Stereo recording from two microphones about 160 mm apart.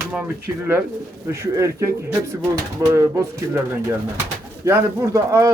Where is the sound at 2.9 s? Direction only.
20° right (ahead or behind).